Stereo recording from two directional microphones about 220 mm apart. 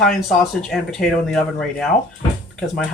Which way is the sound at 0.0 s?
Centre (ahead or behind).